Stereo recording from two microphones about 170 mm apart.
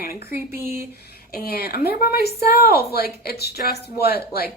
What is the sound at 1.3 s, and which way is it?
Speech, 65° left (ahead or behind).